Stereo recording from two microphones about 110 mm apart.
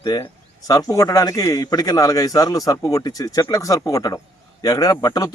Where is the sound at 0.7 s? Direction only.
30° left (ahead or behind).